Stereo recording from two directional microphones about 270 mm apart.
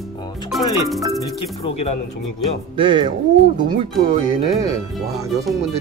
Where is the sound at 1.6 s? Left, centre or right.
Left.